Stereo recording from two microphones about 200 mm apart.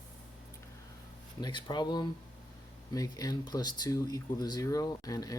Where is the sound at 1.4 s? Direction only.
20° left (ahead or behind).